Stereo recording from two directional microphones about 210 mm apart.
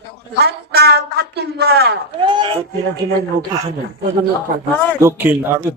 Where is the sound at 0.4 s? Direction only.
50° right (ahead or behind).